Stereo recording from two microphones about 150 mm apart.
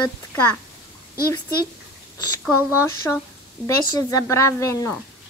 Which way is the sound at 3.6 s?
20° left (ahead or behind).